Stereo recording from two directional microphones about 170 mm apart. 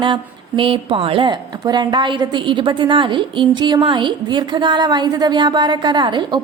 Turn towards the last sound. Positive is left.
turn(degrees=-25)  # may be behind; listen again after turning